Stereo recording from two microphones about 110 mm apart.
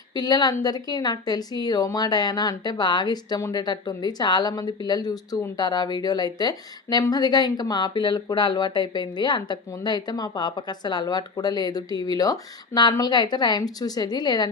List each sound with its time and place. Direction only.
0.1 s speech: 40° left (ahead or behind)